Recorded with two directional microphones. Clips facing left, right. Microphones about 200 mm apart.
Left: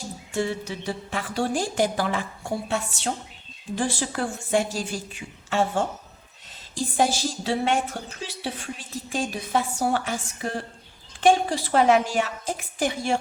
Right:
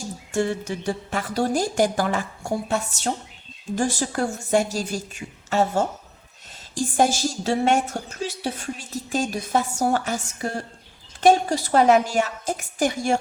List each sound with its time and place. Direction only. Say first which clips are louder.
0.3 s a woman's voice: right 3 dB; 45° right (ahead or behind)